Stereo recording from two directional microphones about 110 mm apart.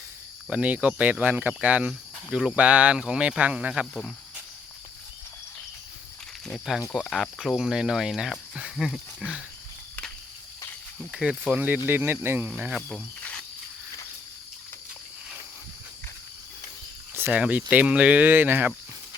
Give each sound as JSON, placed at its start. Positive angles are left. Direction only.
{"t": 0.5, "sound": "speech", "side_deg": -10}
{"t": 6.4, "sound": "speech", "side_deg": 0}
{"t": 11.1, "sound": "speech", "side_deg": -5}
{"t": 17.2, "sound": "speech", "side_deg": -10}